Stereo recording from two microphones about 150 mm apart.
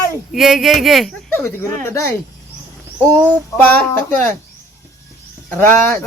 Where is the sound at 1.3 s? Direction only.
20° left (ahead or behind).